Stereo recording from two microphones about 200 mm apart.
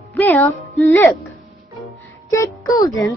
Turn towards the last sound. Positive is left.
turn(degrees=15)  # may be behind; listen again after turning